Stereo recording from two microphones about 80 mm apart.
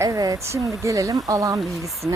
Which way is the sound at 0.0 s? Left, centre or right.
Right.